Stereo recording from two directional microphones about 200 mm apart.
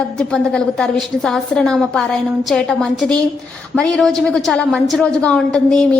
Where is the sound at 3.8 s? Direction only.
5° left (ahead or behind).